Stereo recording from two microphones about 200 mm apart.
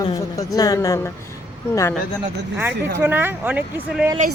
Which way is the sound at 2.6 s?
10° right (ahead or behind).